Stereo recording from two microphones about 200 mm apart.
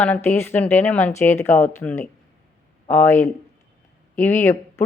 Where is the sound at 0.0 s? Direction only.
10° left (ahead or behind).